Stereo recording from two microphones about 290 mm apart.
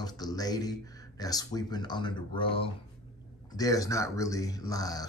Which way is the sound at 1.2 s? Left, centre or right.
Centre.